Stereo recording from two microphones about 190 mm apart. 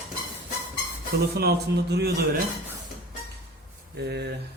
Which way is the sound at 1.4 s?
60° right (ahead or behind).